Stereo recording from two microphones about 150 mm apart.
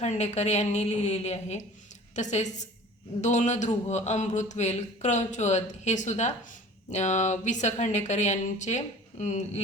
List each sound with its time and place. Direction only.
0.0 s a man's voice: 50° left (ahead or behind)